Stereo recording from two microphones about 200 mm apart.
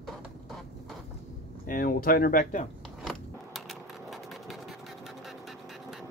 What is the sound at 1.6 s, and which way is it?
Speech, 45° left (ahead or behind).